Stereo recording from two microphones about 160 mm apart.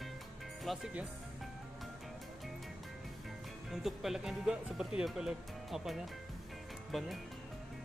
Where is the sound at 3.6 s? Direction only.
Centre (ahead or behind).